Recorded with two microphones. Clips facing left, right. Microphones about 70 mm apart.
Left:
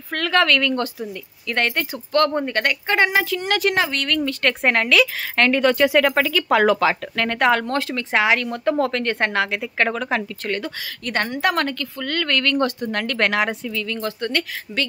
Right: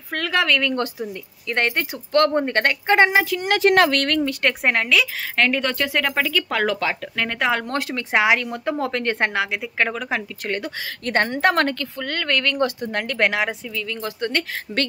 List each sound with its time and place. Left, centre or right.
0.1 s speech: centre
0.7 s speech: right
3.7 s speech: right
4.2 s speech: centre
4.6 s speech: centre
7.6 s speech: right
11.1 s a woman's voice: right
12.0 s speech: right